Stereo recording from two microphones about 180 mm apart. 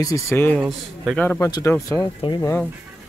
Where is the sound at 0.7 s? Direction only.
Centre (ahead or behind).